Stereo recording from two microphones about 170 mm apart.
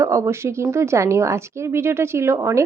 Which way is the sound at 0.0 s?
15° right (ahead or behind).